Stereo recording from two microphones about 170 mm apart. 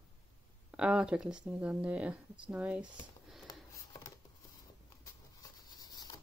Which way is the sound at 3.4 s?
20° left (ahead or behind).